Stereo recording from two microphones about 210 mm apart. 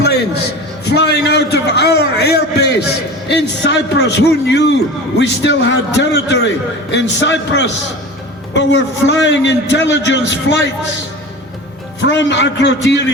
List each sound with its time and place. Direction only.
0.0 s a sound: 50° left (ahead or behind)
0.9 s a man's voice: 50° left (ahead or behind)
12.0 s a man's voice: 60° left (ahead or behind)